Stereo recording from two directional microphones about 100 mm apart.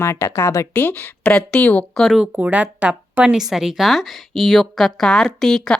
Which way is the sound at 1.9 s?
5° left (ahead or behind).